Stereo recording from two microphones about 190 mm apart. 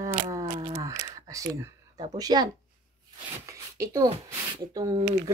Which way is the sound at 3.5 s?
15° right (ahead or behind).